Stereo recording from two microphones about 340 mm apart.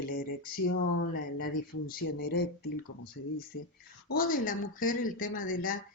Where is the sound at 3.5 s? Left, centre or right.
Left.